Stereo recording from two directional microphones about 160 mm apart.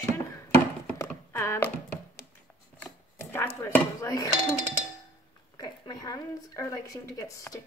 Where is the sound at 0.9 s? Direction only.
20° left (ahead or behind).